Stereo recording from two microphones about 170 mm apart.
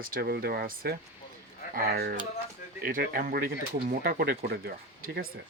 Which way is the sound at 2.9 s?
55° right (ahead or behind).